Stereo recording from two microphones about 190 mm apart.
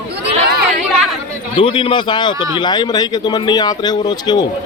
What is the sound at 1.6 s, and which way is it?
Speech, 25° left (ahead or behind).